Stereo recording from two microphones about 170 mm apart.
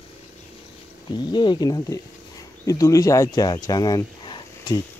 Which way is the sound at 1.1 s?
25° left (ahead or behind).